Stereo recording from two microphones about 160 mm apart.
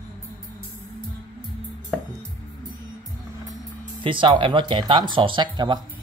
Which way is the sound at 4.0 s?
30° right (ahead or behind).